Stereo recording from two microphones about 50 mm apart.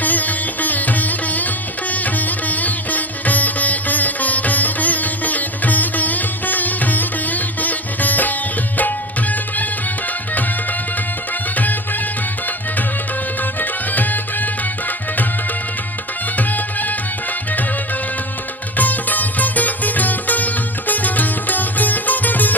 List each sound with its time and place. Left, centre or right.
0.0 s music: left
11.5 s music: left
13.6 s music: left
16.4 s music: left
18.8 s music: left